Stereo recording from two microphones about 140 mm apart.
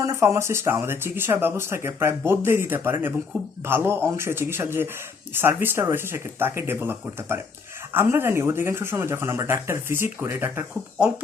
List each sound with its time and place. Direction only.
0.0 s speech: 20° right (ahead or behind)